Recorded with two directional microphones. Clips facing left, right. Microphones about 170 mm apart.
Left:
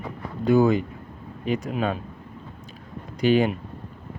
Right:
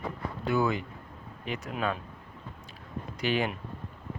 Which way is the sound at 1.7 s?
30° left (ahead or behind).